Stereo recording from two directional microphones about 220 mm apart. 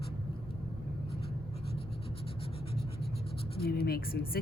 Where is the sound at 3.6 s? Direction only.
45° left (ahead or behind).